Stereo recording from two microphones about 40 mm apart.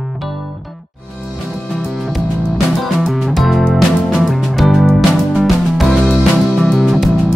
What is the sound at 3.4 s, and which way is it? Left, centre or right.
Music, centre.